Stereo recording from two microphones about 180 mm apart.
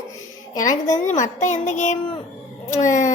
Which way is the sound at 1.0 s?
45° left (ahead or behind).